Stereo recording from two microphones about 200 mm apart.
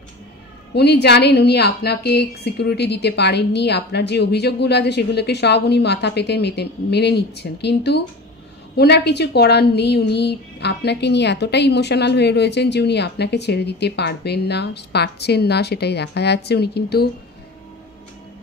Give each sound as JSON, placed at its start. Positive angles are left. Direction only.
{"t": 0.7, "sound": "a woman's voice", "side_deg": 55}